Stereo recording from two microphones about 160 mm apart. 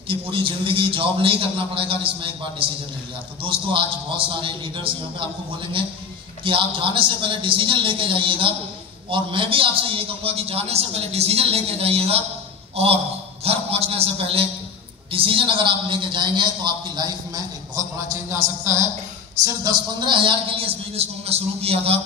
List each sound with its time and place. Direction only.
0.1 s a man's voice: 35° right (ahead or behind)
6.4 s a man's voice: 30° right (ahead or behind)
17.8 s a sound: 20° right (ahead or behind)
18.1 s a man's voice: 15° right (ahead or behind); by 21.9 s 40° right (ahead or behind)